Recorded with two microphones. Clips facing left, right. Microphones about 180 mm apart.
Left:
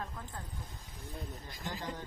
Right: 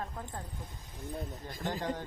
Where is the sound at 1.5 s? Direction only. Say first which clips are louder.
Right 7 dB; 50° right (ahead or behind).